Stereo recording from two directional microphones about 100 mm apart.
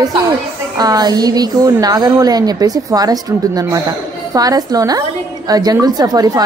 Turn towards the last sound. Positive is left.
turn(degrees=-40)  # may be behind; listen again after turning